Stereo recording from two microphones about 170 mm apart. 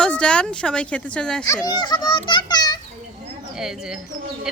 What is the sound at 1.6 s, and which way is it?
A child's voice, 25° left (ahead or behind).